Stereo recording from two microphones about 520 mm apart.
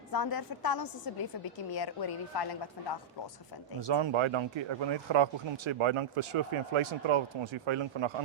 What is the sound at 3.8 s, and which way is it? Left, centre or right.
Speech, right.